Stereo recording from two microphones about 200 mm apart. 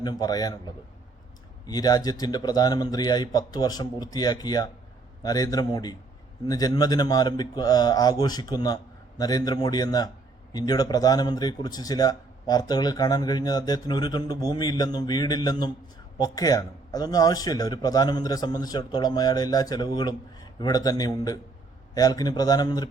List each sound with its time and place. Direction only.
0.0 s a man's voice: 20° left (ahead or behind)
1.6 s a man's voice: 20° left (ahead or behind)